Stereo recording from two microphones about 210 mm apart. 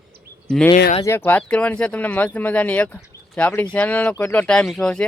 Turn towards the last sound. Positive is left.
turn(degrees=5)  # may be behind; listen again after turning